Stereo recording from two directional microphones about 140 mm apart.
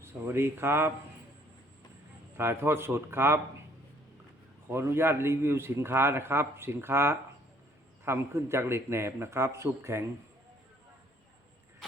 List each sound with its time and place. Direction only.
0.0 s a man's voice: 20° right (ahead or behind)
2.4 s a man's voice: 15° right (ahead or behind)
4.7 s a man's voice: 15° right (ahead or behind)